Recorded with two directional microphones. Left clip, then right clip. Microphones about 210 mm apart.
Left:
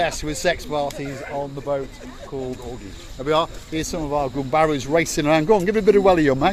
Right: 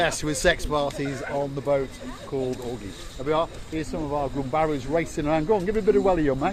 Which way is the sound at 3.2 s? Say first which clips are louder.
Left 4 dB; 60° left (ahead or behind).